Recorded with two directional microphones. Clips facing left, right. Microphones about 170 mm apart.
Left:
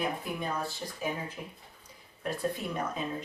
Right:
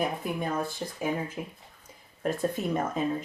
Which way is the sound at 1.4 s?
60° right (ahead or behind).